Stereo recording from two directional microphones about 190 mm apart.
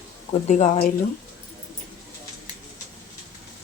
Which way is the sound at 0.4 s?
40° left (ahead or behind).